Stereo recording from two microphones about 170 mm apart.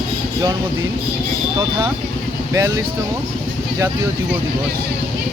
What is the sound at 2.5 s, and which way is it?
Speech, 15° right (ahead or behind).